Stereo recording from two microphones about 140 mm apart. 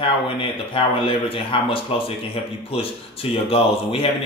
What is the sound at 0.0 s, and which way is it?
Speech, 40° left (ahead or behind).